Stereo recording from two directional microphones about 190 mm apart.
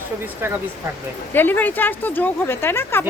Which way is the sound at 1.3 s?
10° left (ahead or behind).